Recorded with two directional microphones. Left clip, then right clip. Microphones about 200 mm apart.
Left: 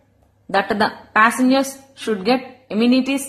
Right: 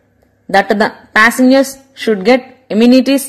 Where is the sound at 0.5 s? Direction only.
30° right (ahead or behind).